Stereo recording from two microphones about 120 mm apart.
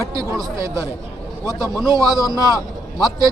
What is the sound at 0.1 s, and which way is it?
Speech, 30° right (ahead or behind).